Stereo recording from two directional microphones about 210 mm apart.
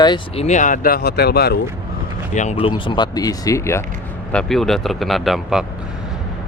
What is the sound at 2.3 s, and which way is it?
Speech, 30° left (ahead or behind).